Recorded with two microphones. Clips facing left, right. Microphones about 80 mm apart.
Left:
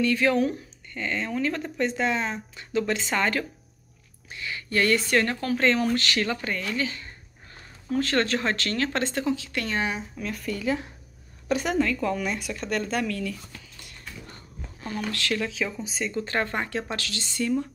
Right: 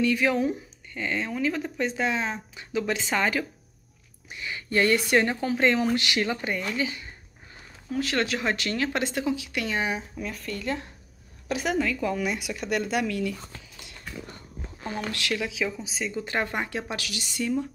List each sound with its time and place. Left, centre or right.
0.0 s speech: centre
4.3 s speech: right
10.3 s speech: centre
14.8 s speech: right
15.2 s speech: centre